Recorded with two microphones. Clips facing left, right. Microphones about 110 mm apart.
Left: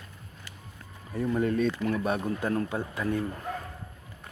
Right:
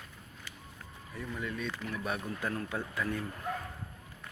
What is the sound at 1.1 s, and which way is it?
Speech, 40° left (ahead or behind).